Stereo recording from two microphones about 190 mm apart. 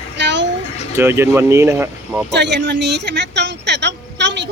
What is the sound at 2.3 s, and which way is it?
A woman's voice, 65° right (ahead or behind).